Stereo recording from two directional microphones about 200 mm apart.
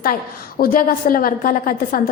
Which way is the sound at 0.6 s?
45° left (ahead or behind).